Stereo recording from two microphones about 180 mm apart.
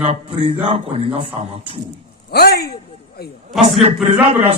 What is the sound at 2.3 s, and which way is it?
Speech, 60° left (ahead or behind).